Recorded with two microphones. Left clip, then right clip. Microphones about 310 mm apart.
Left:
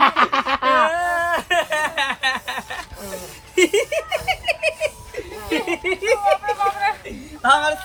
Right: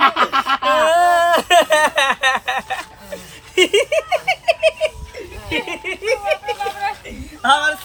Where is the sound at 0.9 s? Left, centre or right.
Right; by 6.3 s centre.